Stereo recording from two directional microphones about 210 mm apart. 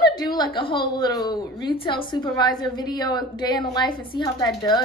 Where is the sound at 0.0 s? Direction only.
20° left (ahead or behind).